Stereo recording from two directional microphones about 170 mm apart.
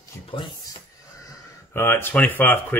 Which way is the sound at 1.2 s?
15° left (ahead or behind).